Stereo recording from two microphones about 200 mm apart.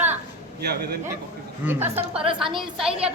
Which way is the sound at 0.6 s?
55° right (ahead or behind).